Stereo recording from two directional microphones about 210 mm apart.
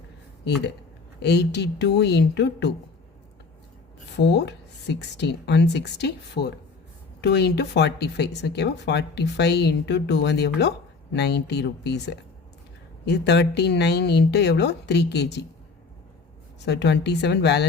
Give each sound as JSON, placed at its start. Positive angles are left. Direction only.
{"t": 1.2, "sound": "speech", "side_deg": 55}
{"t": 4.2, "sound": "a woman's voice", "side_deg": 55}
{"t": 16.6, "sound": "a woman's voice", "side_deg": 55}